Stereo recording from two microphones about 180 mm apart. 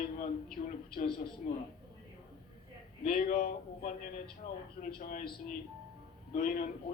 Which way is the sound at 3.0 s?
50° left (ahead or behind).